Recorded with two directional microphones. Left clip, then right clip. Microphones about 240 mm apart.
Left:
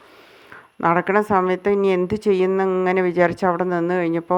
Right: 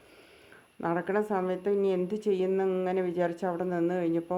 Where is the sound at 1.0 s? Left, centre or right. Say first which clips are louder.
Left 11 dB; left.